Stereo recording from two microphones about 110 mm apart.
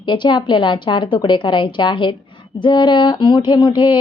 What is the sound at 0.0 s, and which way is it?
Speech, 45° left (ahead or behind).